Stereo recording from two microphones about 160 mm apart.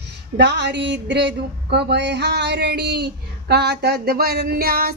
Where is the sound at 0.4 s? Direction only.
90° right.